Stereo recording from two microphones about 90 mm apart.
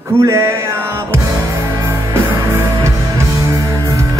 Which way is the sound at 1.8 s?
30° right (ahead or behind).